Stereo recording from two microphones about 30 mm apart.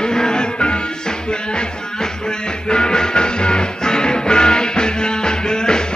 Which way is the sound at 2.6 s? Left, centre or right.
Left.